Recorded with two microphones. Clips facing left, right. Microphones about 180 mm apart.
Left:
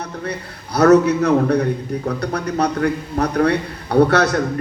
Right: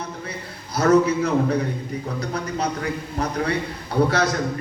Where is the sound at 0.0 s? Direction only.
65° left (ahead or behind).